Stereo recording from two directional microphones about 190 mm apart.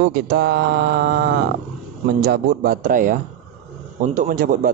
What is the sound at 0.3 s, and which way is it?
Mantra, 60° right (ahead or behind).